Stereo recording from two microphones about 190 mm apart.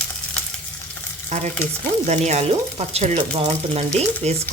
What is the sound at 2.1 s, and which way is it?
A woman's voice, 35° right (ahead or behind).